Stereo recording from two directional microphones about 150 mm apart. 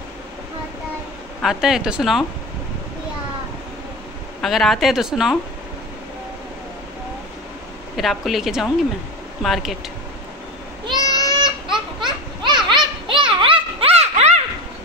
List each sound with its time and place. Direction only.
1.4 s speech: 5° right (ahead or behind)
4.4 s speech: centre (ahead or behind)
7.9 s speech: centre (ahead or behind)
10.9 s goat: 30° right (ahead or behind)
12.4 s children playing: 30° right (ahead or behind); by 14.4 s 45° right (ahead or behind)